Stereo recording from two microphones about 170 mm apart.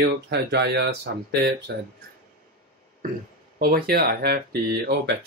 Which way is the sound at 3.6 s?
65° right (ahead or behind).